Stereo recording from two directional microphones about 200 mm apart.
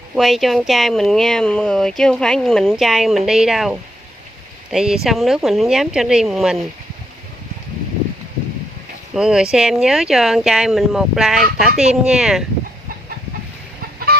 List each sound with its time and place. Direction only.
0.1 s speech: centre (ahead or behind)
9.1 s speech: 5° right (ahead or behind)